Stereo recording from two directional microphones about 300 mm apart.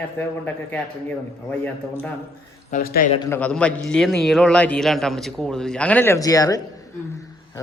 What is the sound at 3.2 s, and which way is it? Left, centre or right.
A man's voice, centre.